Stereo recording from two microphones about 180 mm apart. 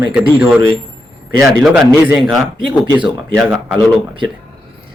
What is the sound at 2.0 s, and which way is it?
Speech, 10° right (ahead or behind).